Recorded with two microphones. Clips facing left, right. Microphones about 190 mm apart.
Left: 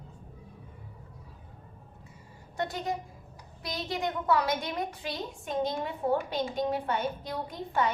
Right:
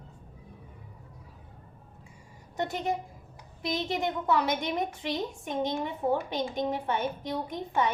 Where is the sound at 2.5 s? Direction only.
20° right (ahead or behind).